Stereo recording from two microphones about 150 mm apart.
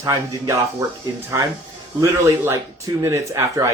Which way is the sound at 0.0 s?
20° right (ahead or behind).